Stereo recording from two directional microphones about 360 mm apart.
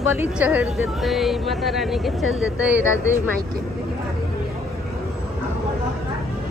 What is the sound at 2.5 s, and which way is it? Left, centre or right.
Speech, centre.